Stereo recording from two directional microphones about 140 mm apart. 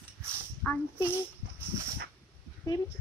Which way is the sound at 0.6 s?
10° left (ahead or behind).